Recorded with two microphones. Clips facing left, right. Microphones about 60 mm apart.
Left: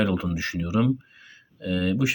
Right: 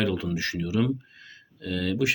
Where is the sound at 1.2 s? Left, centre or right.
Left.